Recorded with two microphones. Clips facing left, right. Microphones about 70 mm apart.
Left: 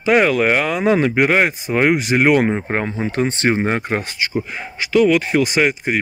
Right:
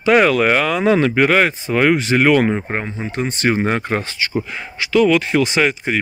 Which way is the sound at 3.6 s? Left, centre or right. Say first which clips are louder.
Right 1 dB; centre.